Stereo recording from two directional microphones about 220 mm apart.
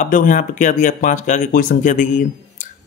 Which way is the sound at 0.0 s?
40° left (ahead or behind).